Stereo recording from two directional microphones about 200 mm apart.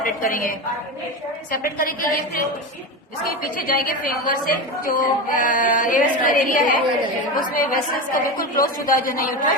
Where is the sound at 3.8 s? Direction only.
45° left (ahead or behind).